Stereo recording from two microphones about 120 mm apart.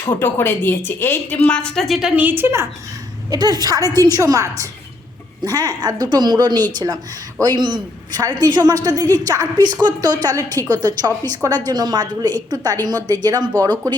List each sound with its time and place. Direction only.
0.0 s a woman's voice: 15° left (ahead or behind); by 2.6 s 20° right (ahead or behind)
3.2 s a woman's voice: 35° right (ahead or behind)